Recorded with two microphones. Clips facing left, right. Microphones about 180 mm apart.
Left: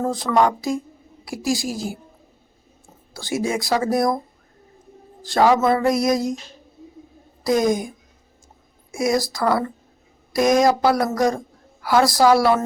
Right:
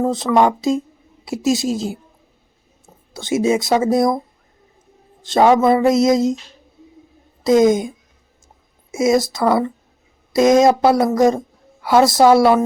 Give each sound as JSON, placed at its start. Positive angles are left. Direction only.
{"t": 0.3, "sound": "a woman's voice", "side_deg": -20}
{"t": 3.1, "sound": "a woman's voice", "side_deg": -20}
{"t": 5.2, "sound": "a woman's voice", "side_deg": -20}
{"t": 7.4, "sound": "a woman's voice", "side_deg": -20}